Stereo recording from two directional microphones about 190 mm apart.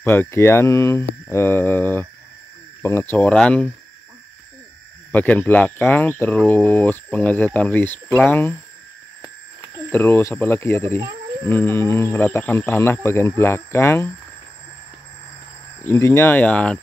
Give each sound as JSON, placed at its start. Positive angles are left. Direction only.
{"t": 0.0, "sound": "speech", "side_deg": 10}
{"t": 5.1, "sound": "speech", "side_deg": 10}
{"t": 9.8, "sound": "speech", "side_deg": 10}
{"t": 15.9, "sound": "speech", "side_deg": 15}